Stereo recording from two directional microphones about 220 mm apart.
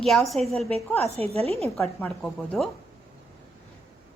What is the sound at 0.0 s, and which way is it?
Speech, centre (ahead or behind).